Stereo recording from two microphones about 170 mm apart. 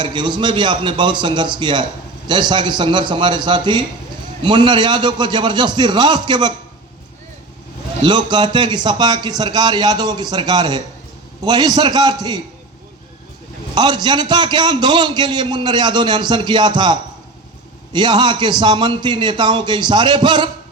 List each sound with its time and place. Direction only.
0.0 s a man's voice: 25° right (ahead or behind)
8.0 s a man's voice: 25° right (ahead or behind)
13.7 s a man's voice: 25° right (ahead or behind)